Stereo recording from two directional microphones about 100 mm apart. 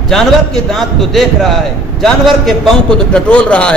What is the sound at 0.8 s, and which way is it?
A man's voice, centre (ahead or behind).